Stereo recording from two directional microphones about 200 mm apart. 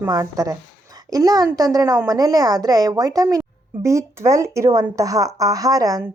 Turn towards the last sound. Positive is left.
turn(degrees=-15)  # may be behind; listen again after turning